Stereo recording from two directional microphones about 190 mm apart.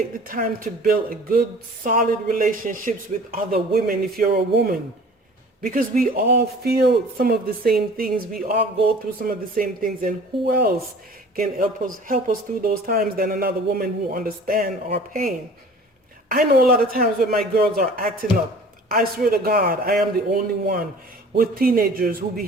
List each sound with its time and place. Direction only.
0.3 s speech: 45° right (ahead or behind)
5.6 s speech: 45° right (ahead or behind)
16.3 s speech: 50° right (ahead or behind)